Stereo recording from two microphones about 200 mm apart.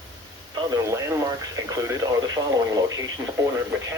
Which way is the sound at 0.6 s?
20° right (ahead or behind).